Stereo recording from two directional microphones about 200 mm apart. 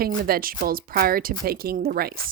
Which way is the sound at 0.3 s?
45° right (ahead or behind).